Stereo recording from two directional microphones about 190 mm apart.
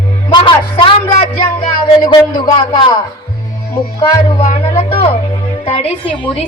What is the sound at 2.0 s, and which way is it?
Speech, 25° left (ahead or behind).